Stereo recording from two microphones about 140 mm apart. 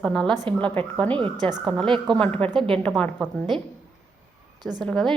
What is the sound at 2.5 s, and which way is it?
Speech, 35° right (ahead or behind).